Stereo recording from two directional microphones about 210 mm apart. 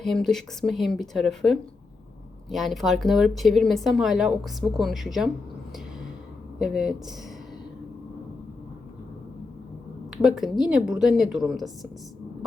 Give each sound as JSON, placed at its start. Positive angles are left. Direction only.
{"t": 0.0, "sound": "speech", "side_deg": 0}
{"t": 6.6, "sound": "speech", "side_deg": 0}
{"t": 10.2, "sound": "speech", "side_deg": 0}